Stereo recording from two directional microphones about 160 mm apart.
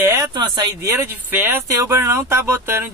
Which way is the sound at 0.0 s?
20° right (ahead or behind).